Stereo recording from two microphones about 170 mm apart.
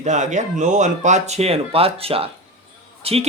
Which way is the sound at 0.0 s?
45° right (ahead or behind).